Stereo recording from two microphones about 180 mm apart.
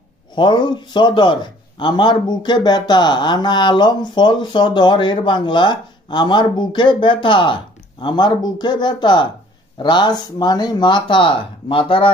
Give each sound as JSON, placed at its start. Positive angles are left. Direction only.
{"t": 0.3, "sound": "a man's voice", "side_deg": 25}